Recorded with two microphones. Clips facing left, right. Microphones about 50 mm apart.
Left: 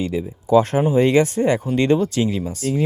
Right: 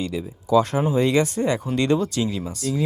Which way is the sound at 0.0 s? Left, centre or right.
Left.